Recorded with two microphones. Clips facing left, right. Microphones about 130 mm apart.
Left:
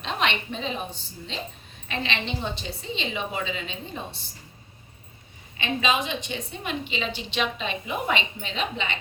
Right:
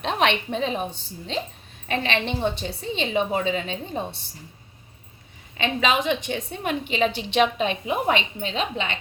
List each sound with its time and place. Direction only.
0.0 s a woman's voice: 60° right (ahead or behind); by 4.0 s 45° right (ahead or behind)
5.5 s a woman's voice: 65° right (ahead or behind)
8.0 s a woman's voice: 40° right (ahead or behind)